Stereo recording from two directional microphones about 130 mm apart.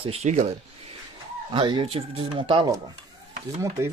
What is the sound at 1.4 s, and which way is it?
Speech, 40° right (ahead or behind).